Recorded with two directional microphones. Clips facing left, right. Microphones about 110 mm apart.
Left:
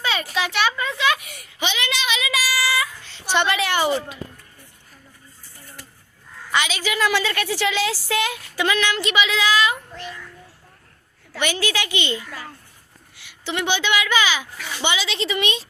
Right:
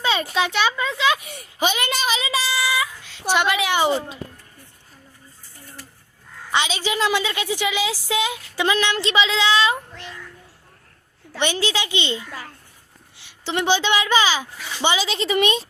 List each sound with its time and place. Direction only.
0.1 s speech: 25° right (ahead or behind)
0.9 s a woman's voice: 15° right (ahead or behind)
1.2 s child singing: 30° right (ahead or behind)
3.3 s a woman's voice: 10° right (ahead or behind)
6.5 s speech: 25° right (ahead or behind)
7.1 s speech: 15° right (ahead or behind)
11.3 s a woman's voice: 25° right (ahead or behind); by 15.6 s 45° right (ahead or behind)